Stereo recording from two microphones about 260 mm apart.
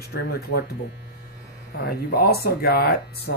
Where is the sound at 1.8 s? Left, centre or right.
Left.